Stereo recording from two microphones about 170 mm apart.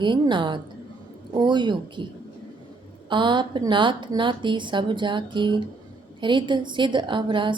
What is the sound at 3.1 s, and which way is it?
Speech, 25° right (ahead or behind).